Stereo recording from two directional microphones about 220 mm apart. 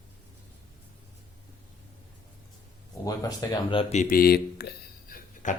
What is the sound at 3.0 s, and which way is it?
Speech, 15° left (ahead or behind).